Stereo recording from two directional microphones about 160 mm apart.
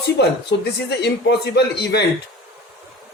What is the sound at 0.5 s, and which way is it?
A man's voice, 90° left.